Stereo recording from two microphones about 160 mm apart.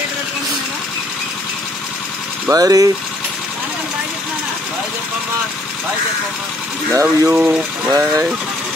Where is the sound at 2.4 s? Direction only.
20° right (ahead or behind).